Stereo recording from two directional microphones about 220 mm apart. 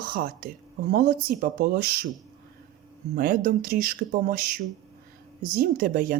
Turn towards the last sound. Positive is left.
turn(degrees=-40)  # may be behind; listen again after turning